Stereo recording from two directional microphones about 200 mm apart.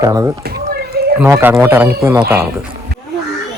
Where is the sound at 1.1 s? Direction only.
10° right (ahead or behind).